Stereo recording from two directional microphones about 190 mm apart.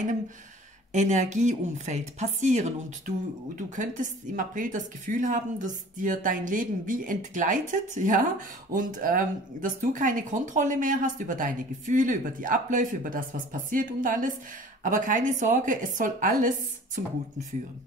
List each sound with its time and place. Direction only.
0.9 s a woman's voice: 40° right (ahead or behind)